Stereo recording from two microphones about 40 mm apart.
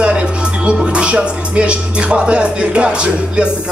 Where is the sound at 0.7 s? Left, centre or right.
Right.